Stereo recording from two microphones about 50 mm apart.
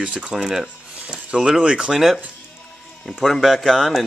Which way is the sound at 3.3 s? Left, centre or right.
Centre.